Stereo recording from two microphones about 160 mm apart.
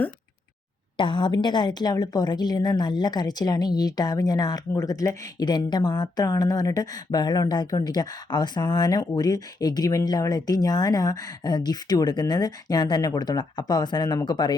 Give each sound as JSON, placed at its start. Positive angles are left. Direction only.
{"t": 0.9, "sound": "a woman's voice", "side_deg": 30}